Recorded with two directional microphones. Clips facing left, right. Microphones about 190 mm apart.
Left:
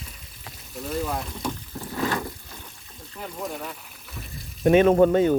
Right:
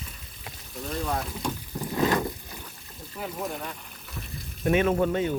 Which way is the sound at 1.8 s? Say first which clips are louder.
Right 3 dB; 20° right (ahead or behind).